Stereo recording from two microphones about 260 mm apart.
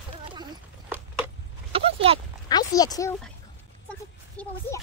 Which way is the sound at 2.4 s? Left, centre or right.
Centre.